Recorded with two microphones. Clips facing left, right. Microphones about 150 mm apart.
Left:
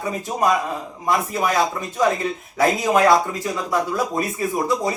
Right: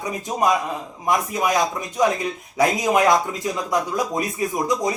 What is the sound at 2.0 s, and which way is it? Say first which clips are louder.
Mantra: even; 20° right (ahead or behind).